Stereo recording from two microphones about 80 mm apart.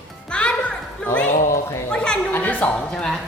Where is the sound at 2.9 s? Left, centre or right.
Centre.